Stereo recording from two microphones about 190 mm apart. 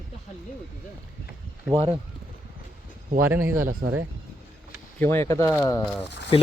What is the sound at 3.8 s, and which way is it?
Speech, 55° right (ahead or behind).